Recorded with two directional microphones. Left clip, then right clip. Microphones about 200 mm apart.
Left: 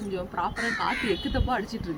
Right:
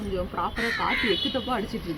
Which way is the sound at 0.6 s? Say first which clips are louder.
Right 3 dB; 25° left (ahead or behind).